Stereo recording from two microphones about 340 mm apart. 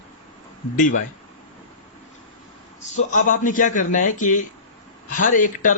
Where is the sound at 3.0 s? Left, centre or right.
Left.